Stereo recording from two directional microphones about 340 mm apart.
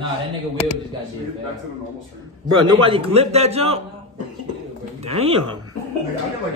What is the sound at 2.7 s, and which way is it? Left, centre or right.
A man's voice, centre.